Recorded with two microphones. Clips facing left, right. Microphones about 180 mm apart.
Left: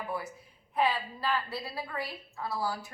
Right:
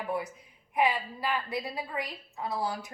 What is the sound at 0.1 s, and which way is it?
Speech, 20° right (ahead or behind).